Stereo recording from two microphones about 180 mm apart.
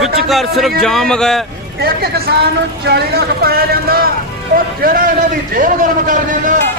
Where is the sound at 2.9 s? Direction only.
65° right (ahead or behind).